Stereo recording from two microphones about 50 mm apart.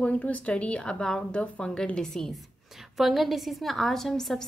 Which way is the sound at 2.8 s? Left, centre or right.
Centre.